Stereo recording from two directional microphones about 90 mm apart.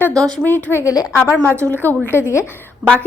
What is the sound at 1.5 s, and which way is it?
Speech, 30° right (ahead or behind).